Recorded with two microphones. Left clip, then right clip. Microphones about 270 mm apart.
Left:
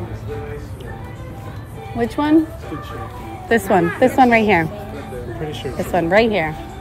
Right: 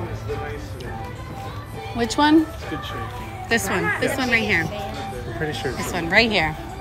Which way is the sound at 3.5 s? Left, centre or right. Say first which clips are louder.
Left 5 dB; centre.